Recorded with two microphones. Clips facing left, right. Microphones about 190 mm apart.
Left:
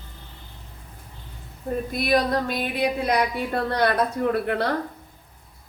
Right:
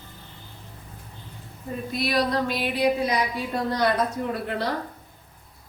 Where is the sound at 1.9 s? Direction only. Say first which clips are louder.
Left 2 dB; 50° left (ahead or behind).